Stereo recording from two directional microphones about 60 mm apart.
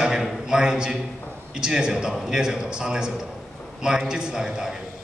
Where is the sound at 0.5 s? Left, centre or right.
Centre.